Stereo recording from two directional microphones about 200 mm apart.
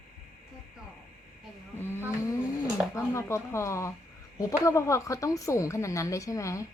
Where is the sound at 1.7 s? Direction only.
10° left (ahead or behind).